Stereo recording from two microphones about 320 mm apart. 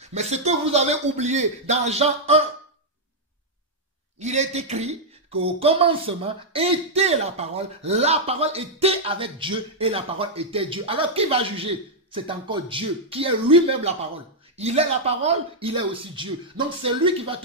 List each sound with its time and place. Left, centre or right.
0.1 s a man's voice: right
4.2 s speech: right